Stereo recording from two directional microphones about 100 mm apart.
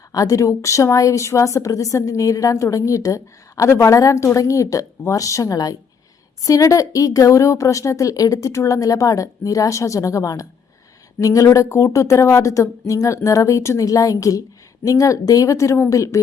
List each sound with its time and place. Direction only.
0.1 s a woman's voice: 35° left (ahead or behind)